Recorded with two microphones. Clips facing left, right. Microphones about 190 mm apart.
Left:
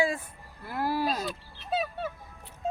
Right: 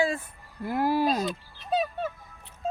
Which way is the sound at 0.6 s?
15° right (ahead or behind).